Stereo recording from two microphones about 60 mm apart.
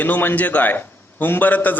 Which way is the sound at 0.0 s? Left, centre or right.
Left.